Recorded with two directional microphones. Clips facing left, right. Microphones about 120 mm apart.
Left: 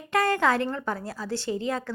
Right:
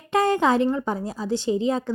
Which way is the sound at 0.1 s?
20° right (ahead or behind).